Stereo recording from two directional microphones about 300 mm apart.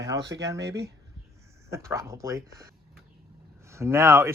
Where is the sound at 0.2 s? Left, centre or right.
Right.